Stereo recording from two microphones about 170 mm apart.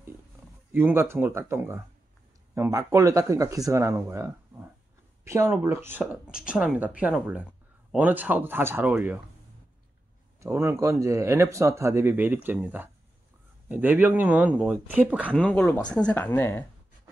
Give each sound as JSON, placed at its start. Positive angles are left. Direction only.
{"t": 0.7, "sound": "speech", "side_deg": -10}
{"t": 10.4, "sound": "speech", "side_deg": -15}
{"t": 15.3, "sound": "speech", "side_deg": 10}